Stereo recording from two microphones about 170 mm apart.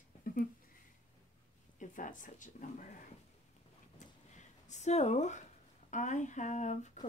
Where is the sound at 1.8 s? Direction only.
50° left (ahead or behind).